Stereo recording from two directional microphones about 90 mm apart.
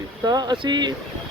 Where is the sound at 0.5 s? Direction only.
60° right (ahead or behind).